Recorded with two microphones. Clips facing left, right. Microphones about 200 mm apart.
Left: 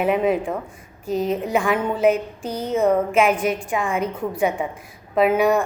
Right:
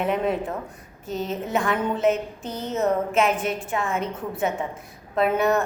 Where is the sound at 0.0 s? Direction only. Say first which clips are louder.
Left 4 dB; 5° left (ahead or behind).